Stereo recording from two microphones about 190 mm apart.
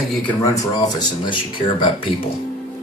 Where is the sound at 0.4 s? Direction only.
20° left (ahead or behind).